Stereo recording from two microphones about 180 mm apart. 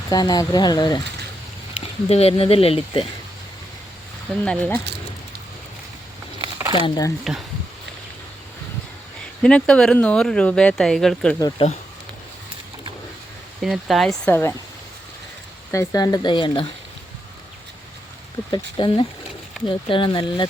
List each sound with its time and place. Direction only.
0.1 s speech: 20° left (ahead or behind)
2.0 s speech: 35° left (ahead or behind)
4.4 s speech: 5° left (ahead or behind)
6.7 s speech: 25° left (ahead or behind)
9.4 s speech: 5° left (ahead or behind)
11.3 s speech: 20° left (ahead or behind)
13.6 s speech: centre (ahead or behind)
15.7 s speech: 15° left (ahead or behind)
18.5 s speech: 25° left (ahead or behind)